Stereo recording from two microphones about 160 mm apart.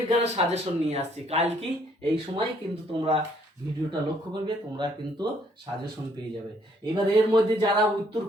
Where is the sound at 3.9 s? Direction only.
25° right (ahead or behind).